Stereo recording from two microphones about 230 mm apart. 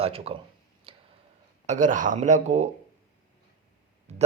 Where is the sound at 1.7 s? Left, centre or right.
Right.